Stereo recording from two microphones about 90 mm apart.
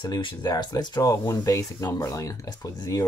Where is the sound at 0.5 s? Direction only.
45° left (ahead or behind).